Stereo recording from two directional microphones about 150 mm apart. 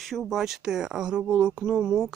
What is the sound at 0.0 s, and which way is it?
Speech, centre (ahead or behind).